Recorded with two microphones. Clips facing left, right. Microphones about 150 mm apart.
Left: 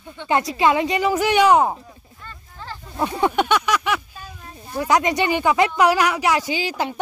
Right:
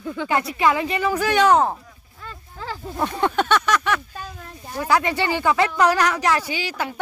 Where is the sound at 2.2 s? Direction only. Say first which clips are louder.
Right 4 dB; 90° right.